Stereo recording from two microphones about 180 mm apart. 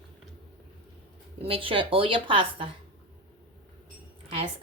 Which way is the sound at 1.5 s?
30° right (ahead or behind).